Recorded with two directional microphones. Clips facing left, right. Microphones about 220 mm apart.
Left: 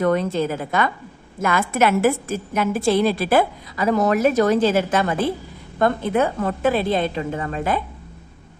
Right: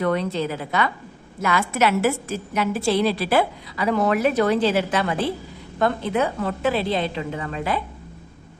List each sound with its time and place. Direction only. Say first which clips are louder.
0.0 s a woman's voice: left 3 dB; 45° left (ahead or behind)